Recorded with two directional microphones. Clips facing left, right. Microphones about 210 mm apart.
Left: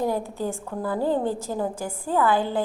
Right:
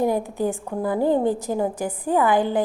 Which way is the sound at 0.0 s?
15° right (ahead or behind).